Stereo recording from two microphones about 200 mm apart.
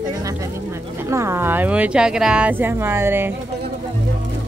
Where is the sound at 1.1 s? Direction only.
15° right (ahead or behind).